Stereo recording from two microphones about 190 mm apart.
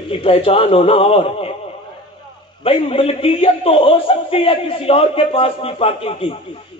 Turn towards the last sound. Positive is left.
turn(degrees=30)  # may be behind; listen again after turning